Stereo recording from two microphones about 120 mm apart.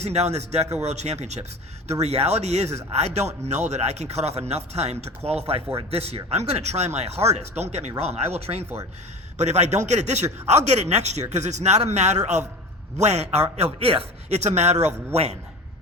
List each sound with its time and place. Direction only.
0.0 s speech: 65° right (ahead or behind)
9.4 s speech: 70° right (ahead or behind)
15.1 s speech: 60° right (ahead or behind)